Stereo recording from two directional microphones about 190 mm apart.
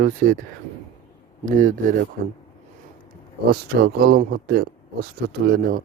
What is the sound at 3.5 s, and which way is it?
Speech, 55° right (ahead or behind).